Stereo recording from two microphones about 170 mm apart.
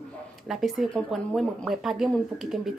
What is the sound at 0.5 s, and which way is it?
Speech, centre (ahead or behind).